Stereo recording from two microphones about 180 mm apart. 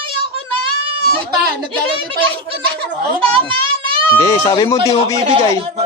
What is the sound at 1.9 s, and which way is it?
A child's voice, 30° right (ahead or behind).